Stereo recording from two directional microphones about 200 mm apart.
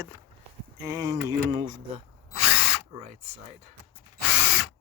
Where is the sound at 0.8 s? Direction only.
15° right (ahead or behind).